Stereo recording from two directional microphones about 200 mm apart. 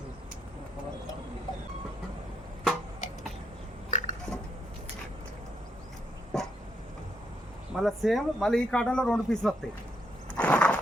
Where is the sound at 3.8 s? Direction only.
40° left (ahead or behind).